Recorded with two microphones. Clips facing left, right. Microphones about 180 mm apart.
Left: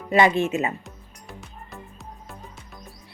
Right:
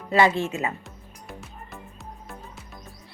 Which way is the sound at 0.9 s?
Centre (ahead or behind).